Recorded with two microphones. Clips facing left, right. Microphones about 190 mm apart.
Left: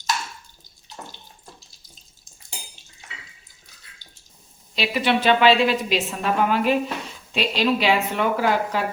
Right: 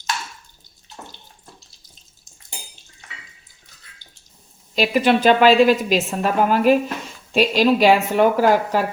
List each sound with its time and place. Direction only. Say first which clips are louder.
4.7 s a woman's voice: right 5 dB; 45° right (ahead or behind)